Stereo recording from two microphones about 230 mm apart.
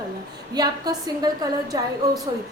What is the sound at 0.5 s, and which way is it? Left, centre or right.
A woman's voice, centre.